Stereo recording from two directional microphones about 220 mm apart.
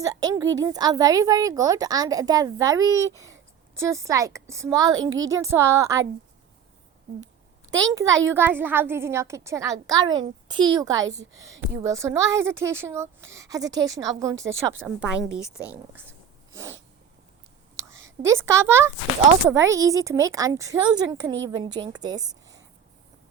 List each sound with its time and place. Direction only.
0.0 s a woman's voice: 15° right (ahead or behind)
4.9 s a woman's voice: 60° right (ahead or behind)
5.3 s a woman's voice: 15° right (ahead or behind)
8.0 s a woman's voice: 60° right (ahead or behind)
8.3 s a woman's voice: 10° right (ahead or behind)
14.3 s a woman's voice: 60° right (ahead or behind)
14.8 s a woman's voice: 5° right (ahead or behind)
18.2 s a woman's voice: 10° right (ahead or behind)